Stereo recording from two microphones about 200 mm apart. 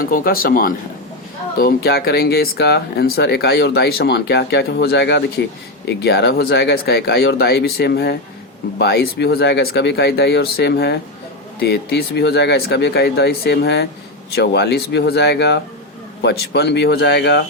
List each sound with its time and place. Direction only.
0.0 s speech: 45° left (ahead or behind)